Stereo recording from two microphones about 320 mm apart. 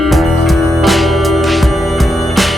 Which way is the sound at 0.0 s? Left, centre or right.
Centre.